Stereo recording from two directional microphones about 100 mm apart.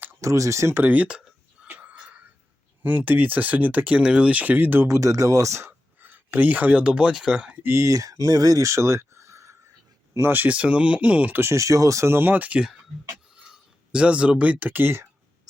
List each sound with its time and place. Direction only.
0.0 s speech: 25° right (ahead or behind)
1.6 s a sound: 15° right (ahead or behind)
2.8 s speech: 15° right (ahead or behind)
7.6 s speech: 30° right (ahead or behind)
10.2 s speech: 20° right (ahead or behind)